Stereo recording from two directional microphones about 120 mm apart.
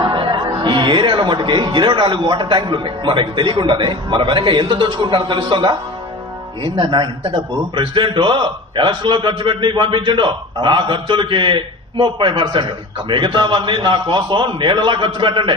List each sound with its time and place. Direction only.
0.0 s a man's voice: 40° right (ahead or behind)